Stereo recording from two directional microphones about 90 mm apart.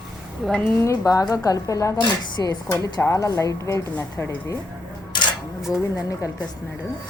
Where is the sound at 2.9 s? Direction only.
35° left (ahead or behind).